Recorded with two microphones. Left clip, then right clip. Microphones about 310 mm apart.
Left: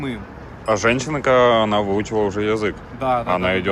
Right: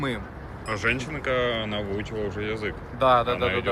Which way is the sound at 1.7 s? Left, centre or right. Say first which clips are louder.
Left 11 dB; left.